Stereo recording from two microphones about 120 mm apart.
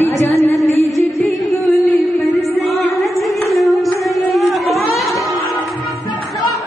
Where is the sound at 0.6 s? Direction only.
25° left (ahead or behind).